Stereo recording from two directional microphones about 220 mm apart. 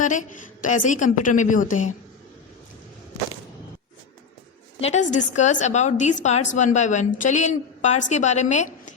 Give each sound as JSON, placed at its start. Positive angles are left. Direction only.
{"t": 0.0, "sound": "a woman's voice", "side_deg": 35}
{"t": 4.9, "sound": "a woman's voice", "side_deg": 35}